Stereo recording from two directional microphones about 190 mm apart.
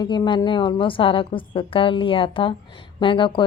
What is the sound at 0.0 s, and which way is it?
A woman's voice, 25° left (ahead or behind).